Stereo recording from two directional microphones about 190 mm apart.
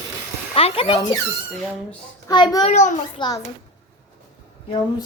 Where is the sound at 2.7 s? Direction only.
40° left (ahead or behind).